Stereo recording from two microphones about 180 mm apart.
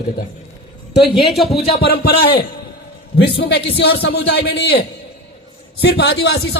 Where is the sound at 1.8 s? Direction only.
60° left (ahead or behind).